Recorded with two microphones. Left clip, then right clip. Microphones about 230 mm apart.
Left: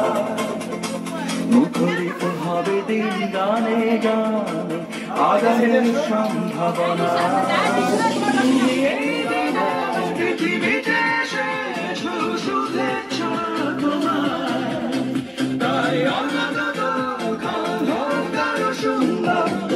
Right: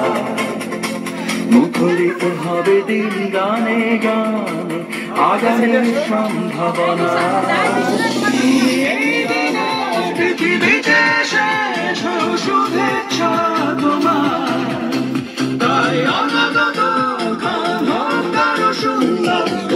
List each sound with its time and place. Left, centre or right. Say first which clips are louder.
1.5 s speech: right 4 dB; right
2.9 s music: right 4 dB; right
5.2 s music: right 2 dB; right
8.6 s music: right 4 dB; right
10.4 s music: right 6 dB; right
12.5 s music: right 8 dB; right
15.6 s music: right 5 dB; right
18.9 s music: right 4 dB; right